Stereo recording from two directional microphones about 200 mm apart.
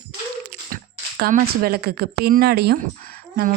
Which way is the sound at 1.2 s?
50° right (ahead or behind).